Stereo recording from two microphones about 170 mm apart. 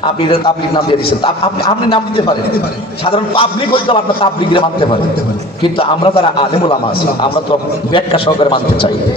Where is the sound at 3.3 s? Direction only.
30° left (ahead or behind).